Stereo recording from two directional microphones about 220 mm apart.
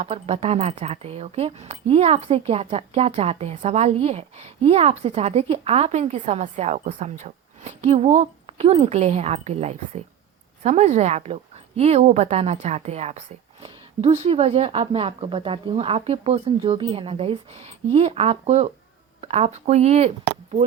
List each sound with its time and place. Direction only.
0.0 s a woman's voice: 30° right (ahead or behind)
19.2 s a sound: 30° right (ahead or behind)
19.6 s a woman's voice: 30° right (ahead or behind)